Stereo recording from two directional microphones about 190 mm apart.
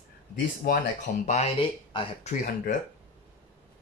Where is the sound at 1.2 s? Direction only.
35° left (ahead or behind).